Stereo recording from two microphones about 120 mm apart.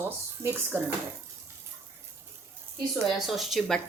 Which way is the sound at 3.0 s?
Centre (ahead or behind).